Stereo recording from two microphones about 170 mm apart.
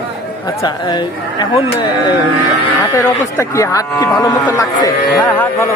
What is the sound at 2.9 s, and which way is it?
A man's voice, 15° left (ahead or behind).